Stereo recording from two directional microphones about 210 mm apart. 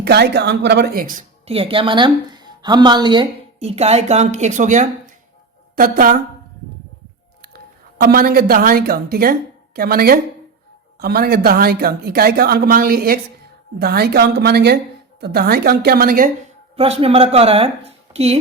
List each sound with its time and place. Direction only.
0.0 s speech: 50° right (ahead or behind)
1.5 s a woman's voice: 25° right (ahead or behind)
7.9 s speech: 45° right (ahead or behind)
16.7 s a woman's voice: 30° right (ahead or behind)